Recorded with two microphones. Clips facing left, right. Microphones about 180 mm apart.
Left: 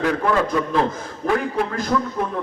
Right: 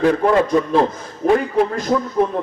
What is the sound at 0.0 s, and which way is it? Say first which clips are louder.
A man's voice: right 5 dB; 30° right (ahead or behind).